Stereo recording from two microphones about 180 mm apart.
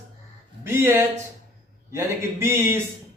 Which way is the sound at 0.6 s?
15° right (ahead or behind).